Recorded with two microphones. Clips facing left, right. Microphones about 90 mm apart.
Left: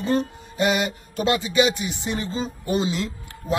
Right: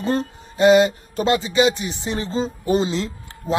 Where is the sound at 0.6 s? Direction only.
25° right (ahead or behind).